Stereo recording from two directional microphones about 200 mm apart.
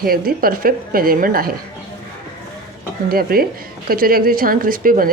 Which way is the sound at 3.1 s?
50° right (ahead or behind).